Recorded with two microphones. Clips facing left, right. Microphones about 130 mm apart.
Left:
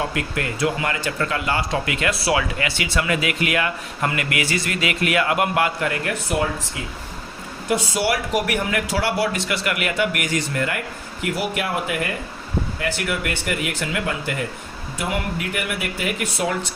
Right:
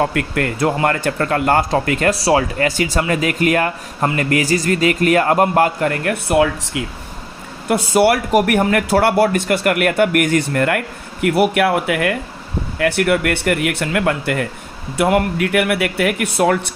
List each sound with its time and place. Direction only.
0.0 s speech: 50° right (ahead or behind)
6.8 s speech: 70° right (ahead or behind)
7.7 s speech: 55° right (ahead or behind)